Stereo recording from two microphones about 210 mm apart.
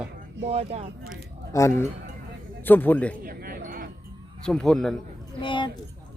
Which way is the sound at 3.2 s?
45° right (ahead or behind).